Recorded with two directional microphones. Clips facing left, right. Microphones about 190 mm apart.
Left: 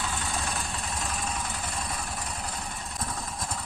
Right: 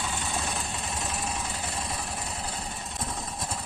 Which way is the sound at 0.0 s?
Centre (ahead or behind).